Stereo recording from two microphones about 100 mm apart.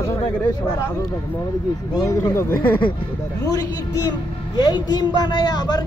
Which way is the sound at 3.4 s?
40° left (ahead or behind).